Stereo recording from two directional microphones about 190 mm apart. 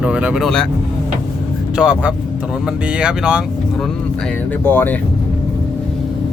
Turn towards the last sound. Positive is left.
turn(degrees=10)  # may be behind; listen again after turning